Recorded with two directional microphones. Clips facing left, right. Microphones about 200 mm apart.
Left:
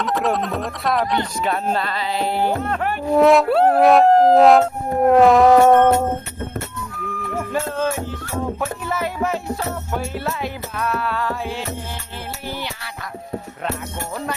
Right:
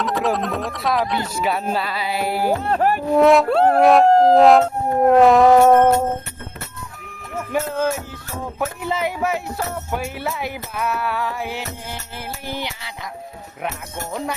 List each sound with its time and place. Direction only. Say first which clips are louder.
0.0 s howl: even; centre (ahead or behind)
2.6 s speech: right 4 dB; 35° right (ahead or behind)
3.1 s howl: left 1 dB; centre (ahead or behind)
8.6 s speech: right 1 dB; 15° right (ahead or behind)
12.5 s a sound: right 1 dB; 15° right (ahead or behind)